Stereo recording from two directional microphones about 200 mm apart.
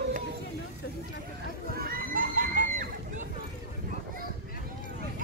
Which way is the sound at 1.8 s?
45° right (ahead or behind).